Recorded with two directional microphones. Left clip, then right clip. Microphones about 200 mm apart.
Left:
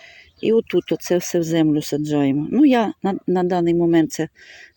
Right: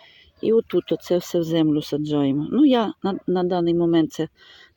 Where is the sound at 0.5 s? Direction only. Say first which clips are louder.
Left 1 dB; 10° left (ahead or behind).